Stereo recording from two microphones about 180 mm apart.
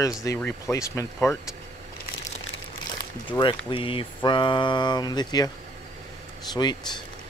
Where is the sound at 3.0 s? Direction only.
25° left (ahead or behind).